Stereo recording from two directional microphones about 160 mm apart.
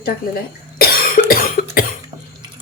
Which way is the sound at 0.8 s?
70° left (ahead or behind).